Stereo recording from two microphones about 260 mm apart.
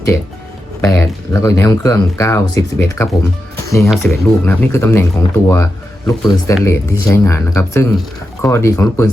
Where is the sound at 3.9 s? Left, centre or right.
Centre.